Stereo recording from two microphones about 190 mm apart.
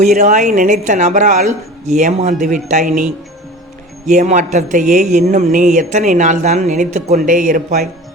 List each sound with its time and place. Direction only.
0.0 s speech: 40° right (ahead or behind)
4.1 s speech: 40° right (ahead or behind)